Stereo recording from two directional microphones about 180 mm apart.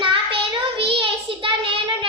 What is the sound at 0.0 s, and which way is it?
Child singing, 30° right (ahead or behind).